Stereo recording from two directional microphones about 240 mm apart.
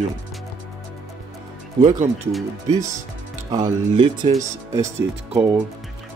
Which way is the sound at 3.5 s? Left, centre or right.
Centre.